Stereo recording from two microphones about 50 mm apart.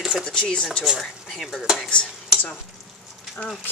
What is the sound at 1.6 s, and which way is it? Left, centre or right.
Speech, centre.